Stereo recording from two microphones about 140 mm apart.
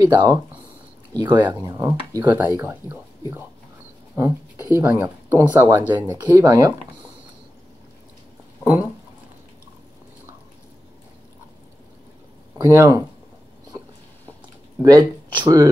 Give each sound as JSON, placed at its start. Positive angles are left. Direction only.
{"t": 0.0, "sound": "speech", "side_deg": -30}
{"t": 1.7, "sound": "speech", "side_deg": -20}
{"t": 6.1, "sound": "speech", "side_deg": -30}
{"t": 8.6, "sound": "speech", "side_deg": -10}
{"t": 12.6, "sound": "speech", "side_deg": -20}
{"t": 14.8, "sound": "speech", "side_deg": -25}